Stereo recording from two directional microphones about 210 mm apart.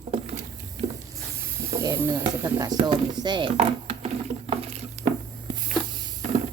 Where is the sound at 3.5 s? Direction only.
30° right (ahead or behind).